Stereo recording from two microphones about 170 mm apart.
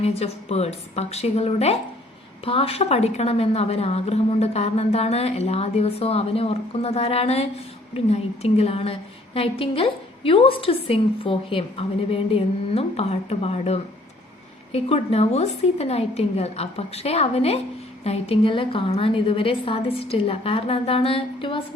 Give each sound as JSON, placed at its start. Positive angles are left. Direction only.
{"t": 0.0, "sound": "a woman's voice", "side_deg": 40}